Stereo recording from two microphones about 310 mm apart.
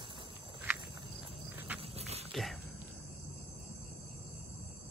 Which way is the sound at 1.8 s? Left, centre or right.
Centre.